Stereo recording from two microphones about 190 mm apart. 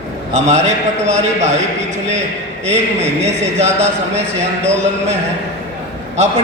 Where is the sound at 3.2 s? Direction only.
35° right (ahead or behind).